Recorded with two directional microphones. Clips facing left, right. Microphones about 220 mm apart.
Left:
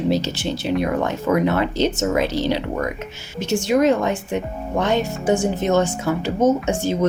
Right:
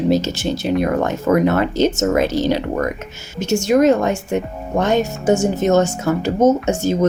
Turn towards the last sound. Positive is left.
turn(degrees=-45)  # may be behind; listen again after turning